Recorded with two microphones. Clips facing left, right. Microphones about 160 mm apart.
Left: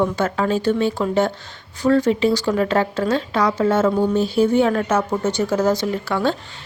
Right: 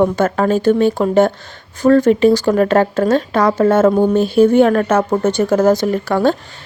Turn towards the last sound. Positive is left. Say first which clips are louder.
# right 6 dB
turn(degrees=-45)  # may be behind; listen again after turning